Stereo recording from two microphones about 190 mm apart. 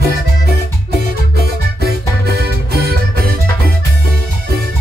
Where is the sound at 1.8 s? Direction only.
55° right (ahead or behind).